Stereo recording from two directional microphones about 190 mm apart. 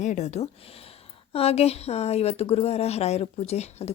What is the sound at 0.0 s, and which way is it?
Speech, 40° left (ahead or behind).